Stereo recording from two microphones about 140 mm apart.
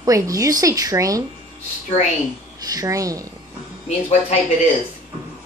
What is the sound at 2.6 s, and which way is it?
Speech, 25° right (ahead or behind).